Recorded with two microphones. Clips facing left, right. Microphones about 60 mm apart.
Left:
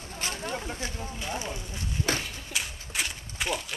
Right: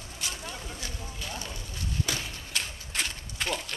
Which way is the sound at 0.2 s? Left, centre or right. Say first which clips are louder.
Left 5 dB; left.